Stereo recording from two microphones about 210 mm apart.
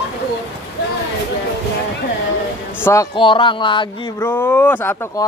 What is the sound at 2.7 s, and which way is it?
Speech, 10° left (ahead or behind).